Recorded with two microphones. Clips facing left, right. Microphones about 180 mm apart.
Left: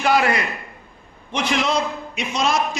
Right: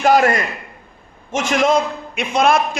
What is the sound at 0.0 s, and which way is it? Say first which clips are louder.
A man's voice: right 4 dB; 45° right (ahead or behind).